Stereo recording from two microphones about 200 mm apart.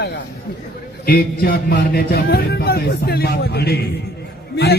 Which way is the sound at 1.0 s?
50° left (ahead or behind).